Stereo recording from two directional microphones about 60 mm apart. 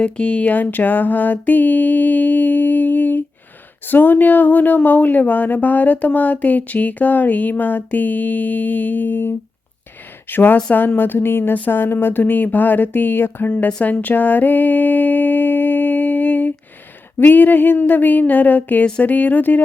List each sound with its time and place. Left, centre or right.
0.0 s speech: centre; by 13.5 s left
13.5 s speech: centre
14.0 s a sound: left
17.2 s speech: left